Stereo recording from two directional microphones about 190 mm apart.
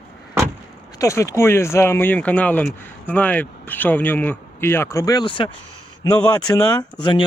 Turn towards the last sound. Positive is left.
turn(degrees=25)  # may be behind; listen again after turning